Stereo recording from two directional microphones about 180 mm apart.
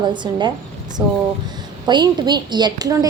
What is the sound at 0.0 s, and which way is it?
Speech, 25° right (ahead or behind).